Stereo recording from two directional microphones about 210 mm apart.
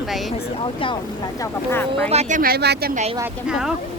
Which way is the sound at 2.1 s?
35° right (ahead or behind).